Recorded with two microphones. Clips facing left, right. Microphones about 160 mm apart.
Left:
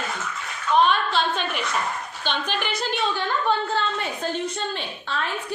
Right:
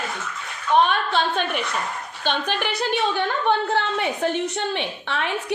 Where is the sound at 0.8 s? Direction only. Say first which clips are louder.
Even; 55° right (ahead or behind).